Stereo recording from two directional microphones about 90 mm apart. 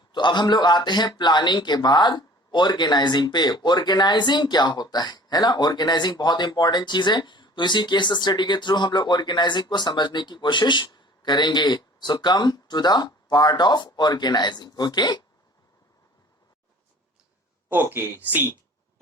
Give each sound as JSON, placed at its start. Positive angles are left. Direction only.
{"t": 0.1, "sound": "a man's voice", "side_deg": 55}
{"t": 17.9, "sound": "speech", "side_deg": -25}